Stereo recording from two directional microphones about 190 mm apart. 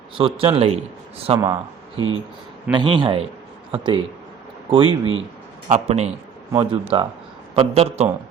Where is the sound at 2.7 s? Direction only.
25° right (ahead or behind).